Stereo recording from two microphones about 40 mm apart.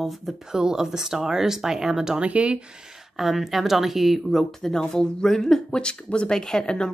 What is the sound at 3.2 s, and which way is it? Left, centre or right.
Speech, centre.